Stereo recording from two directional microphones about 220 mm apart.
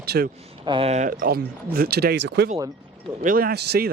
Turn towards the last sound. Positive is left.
turn(degrees=-50)  # may be behind; listen again after turning